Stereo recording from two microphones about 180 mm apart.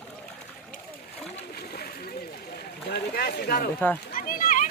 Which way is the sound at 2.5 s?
60° left (ahead or behind).